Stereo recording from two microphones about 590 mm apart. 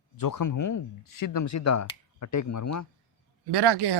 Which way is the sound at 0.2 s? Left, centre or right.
Left.